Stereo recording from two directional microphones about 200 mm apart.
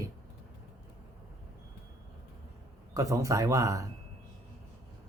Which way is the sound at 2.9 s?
15° right (ahead or behind).